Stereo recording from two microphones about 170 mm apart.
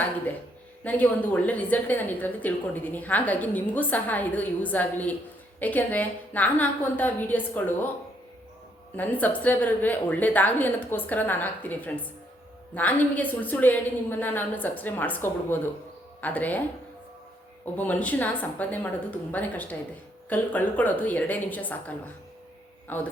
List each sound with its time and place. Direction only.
0.9 s a woman's voice: 10° left (ahead or behind)
9.0 s a woman's voice: 10° left (ahead or behind)
17.7 s a woman's voice: 10° left (ahead or behind)